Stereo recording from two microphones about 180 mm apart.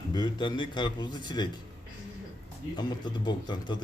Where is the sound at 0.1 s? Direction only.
25° left (ahead or behind).